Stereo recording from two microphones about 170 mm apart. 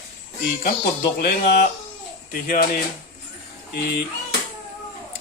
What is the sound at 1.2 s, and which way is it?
Speech, 65° left (ahead or behind).